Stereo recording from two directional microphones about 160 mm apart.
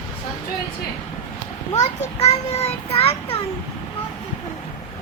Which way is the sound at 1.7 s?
45° left (ahead or behind).